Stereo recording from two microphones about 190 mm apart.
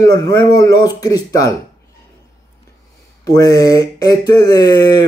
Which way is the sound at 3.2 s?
15° left (ahead or behind).